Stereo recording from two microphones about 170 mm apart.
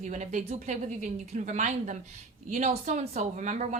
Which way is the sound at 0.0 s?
45° right (ahead or behind).